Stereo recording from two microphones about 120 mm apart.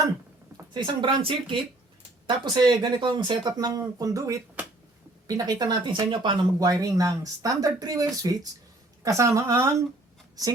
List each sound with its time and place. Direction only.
0.7 s a woman's voice: 40° right (ahead or behind); by 9.7 s 25° right (ahead or behind)